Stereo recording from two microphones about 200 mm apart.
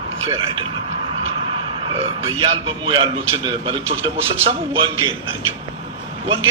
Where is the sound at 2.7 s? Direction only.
25° right (ahead or behind).